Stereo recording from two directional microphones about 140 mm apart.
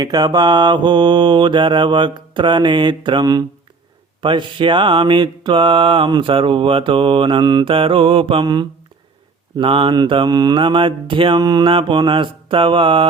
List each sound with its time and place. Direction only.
0.0 s mantra: 30° right (ahead or behind)